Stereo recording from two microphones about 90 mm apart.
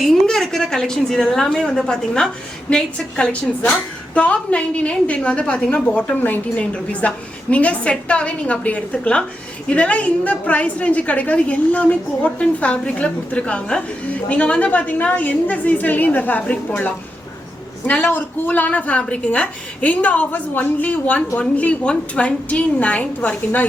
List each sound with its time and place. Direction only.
0.0 s a woman's voice: 5° left (ahead or behind)